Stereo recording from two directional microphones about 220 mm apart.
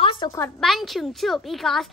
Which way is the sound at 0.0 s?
15° left (ahead or behind).